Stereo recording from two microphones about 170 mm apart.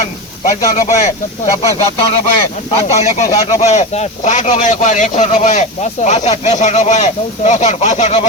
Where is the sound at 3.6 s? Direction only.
40° left (ahead or behind).